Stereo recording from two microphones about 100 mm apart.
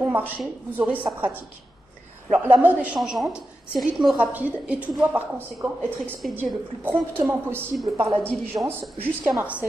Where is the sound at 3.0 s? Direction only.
5° right (ahead or behind).